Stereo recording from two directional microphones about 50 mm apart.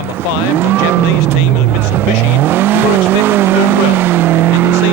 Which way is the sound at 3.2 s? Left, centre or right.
Right.